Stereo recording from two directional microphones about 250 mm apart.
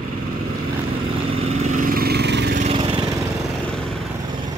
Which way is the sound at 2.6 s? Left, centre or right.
Right.